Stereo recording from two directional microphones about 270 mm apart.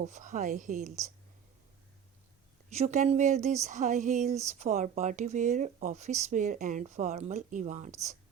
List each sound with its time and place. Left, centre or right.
0.0 s speech: right
2.6 s speech: right